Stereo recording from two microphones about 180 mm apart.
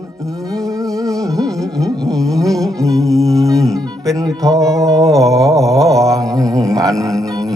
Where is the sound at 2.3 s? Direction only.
20° right (ahead or behind).